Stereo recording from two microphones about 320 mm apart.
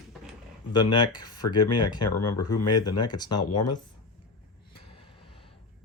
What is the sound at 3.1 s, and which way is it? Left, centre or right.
Speech, centre.